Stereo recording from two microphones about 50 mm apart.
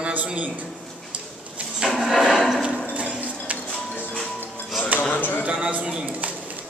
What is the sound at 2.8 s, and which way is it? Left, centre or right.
Hammer, right.